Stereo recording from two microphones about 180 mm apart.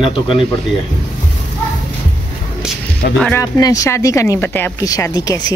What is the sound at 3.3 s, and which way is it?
Speech, 20° left (ahead or behind).